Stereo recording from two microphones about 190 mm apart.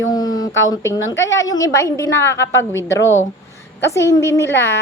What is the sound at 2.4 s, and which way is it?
Speech, 75° left (ahead or behind).